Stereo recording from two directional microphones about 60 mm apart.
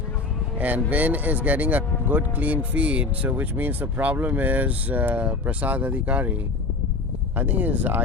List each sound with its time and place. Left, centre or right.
0.6 s speech: right
7.3 s speech: right